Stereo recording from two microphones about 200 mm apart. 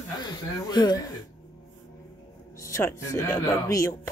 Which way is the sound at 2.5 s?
15° left (ahead or behind).